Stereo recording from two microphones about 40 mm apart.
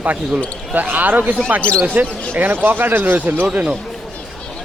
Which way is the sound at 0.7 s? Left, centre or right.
Right.